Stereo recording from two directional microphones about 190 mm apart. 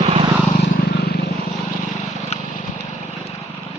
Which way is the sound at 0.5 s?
50° left (ahead or behind).